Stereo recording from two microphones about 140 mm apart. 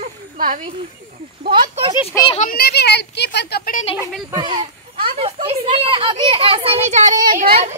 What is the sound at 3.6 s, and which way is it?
Speech, 75° left (ahead or behind).